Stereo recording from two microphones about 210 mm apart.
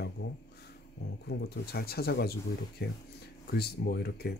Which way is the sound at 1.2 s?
50° left (ahead or behind).